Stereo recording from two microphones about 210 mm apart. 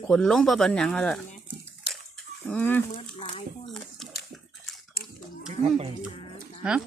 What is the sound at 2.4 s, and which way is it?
Speech, 10° left (ahead or behind).